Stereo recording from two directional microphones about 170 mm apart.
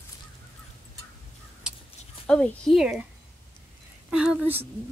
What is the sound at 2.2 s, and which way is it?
Speech, 5° left (ahead or behind).